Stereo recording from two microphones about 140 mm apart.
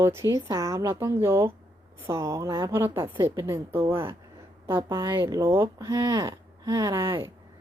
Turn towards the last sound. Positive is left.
turn(degrees=-20)  # may be behind; listen again after turning